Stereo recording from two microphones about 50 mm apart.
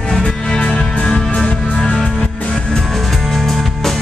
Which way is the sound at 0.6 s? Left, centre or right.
Left.